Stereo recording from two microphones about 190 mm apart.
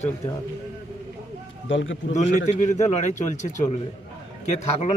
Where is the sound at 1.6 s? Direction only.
85° left.